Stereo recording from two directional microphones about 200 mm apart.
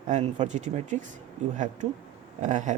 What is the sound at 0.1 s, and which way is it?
Speech, 35° right (ahead or behind).